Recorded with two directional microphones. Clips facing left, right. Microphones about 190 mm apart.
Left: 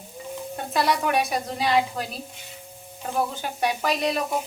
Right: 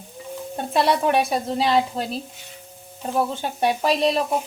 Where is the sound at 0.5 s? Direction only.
30° right (ahead or behind).